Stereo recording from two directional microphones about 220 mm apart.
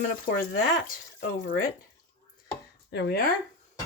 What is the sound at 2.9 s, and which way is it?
Speech, 50° left (ahead or behind).